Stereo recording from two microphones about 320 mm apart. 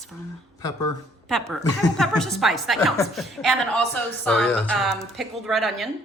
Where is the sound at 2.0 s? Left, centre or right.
Centre.